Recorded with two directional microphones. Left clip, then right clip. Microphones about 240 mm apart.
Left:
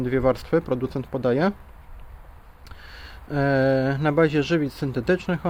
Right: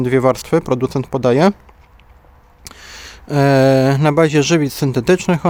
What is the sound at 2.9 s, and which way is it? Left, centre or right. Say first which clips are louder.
Speech: right 9 dB; right.